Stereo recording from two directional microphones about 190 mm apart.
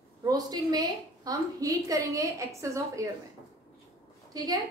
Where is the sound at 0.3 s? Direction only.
20° right (ahead or behind).